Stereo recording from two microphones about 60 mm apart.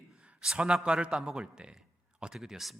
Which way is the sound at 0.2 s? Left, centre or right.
Centre.